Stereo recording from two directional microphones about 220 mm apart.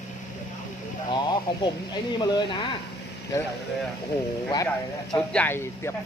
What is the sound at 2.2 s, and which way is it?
Speech, 20° left (ahead or behind).